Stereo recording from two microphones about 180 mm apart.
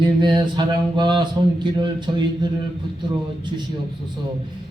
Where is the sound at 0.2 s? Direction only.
25° right (ahead or behind).